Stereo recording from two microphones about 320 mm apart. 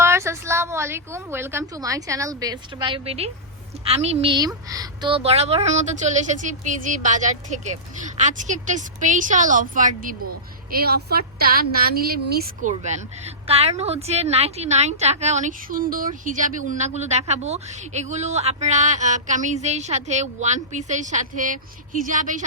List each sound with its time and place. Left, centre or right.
0.0 s a woman's voice: centre; by 22.4 s right